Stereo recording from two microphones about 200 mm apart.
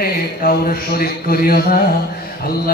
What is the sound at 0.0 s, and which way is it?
A man's voice, 50° left (ahead or behind).